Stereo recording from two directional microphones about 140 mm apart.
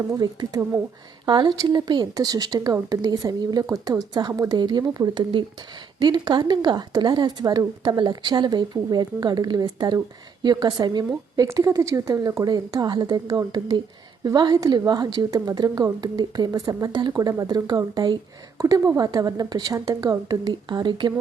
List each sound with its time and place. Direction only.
0.1 s a woman's voice: 25° right (ahead or behind)